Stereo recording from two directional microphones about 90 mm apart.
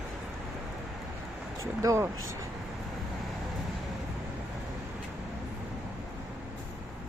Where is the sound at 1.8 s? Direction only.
35° right (ahead or behind).